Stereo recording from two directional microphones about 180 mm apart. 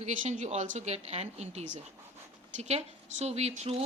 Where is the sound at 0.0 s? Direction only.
40° right (ahead or behind).